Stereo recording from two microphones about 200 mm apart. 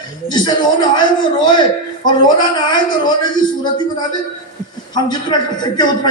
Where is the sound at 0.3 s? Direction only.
20° left (ahead or behind).